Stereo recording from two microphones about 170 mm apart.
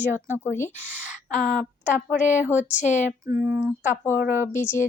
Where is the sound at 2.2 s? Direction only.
45° left (ahead or behind).